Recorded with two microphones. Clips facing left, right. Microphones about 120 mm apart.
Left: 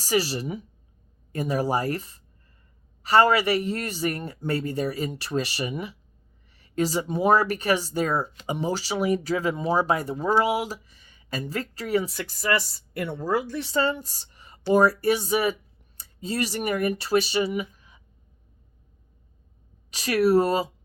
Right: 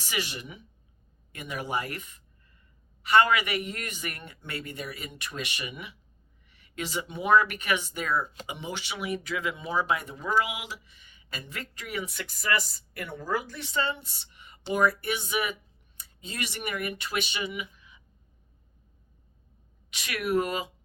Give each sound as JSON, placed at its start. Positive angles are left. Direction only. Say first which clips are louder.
{"t": 0.0, "sound": "speech", "louder": "left 10 dB", "side_deg": 35}
{"t": 19.9, "sound": "speech", "louder": "left 8 dB", "side_deg": 40}